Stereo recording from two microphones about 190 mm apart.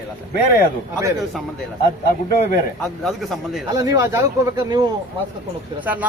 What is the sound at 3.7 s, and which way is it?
Speech, 20° right (ahead or behind).